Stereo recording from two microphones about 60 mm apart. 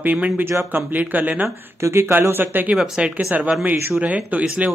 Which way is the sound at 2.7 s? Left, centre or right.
Centre.